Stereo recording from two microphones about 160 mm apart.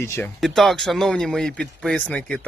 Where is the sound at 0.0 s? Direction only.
15° left (ahead or behind).